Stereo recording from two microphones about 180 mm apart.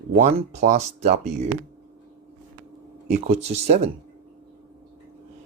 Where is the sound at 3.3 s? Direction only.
35° right (ahead or behind).